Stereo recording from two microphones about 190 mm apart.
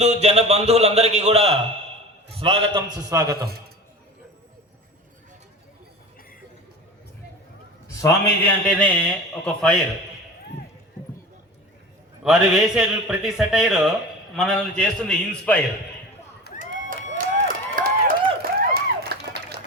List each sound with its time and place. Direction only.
0.0 s a man's voice: 35° right (ahead or behind)
3.0 s a man's voice: 15° right (ahead or behind)
8.0 s a man's voice: 10° left (ahead or behind)
12.2 s a man's voice: centre (ahead or behind)
16.6 s a sound: 45° right (ahead or behind)
18.4 s a sound: 55° right (ahead or behind)